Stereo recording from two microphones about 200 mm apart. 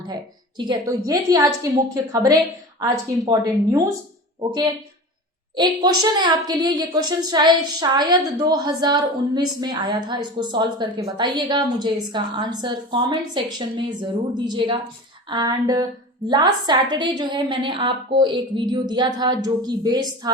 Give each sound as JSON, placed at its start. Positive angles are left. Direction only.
{"t": 0.0, "sound": "a woman's voice", "side_deg": -20}